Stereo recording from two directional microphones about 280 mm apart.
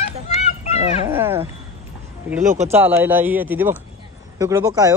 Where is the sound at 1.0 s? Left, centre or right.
Centre.